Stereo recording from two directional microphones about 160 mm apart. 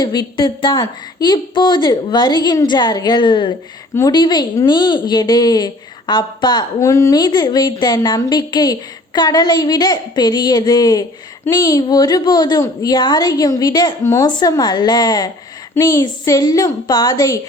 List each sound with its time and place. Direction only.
0.0 s a woman's voice: 30° left (ahead or behind)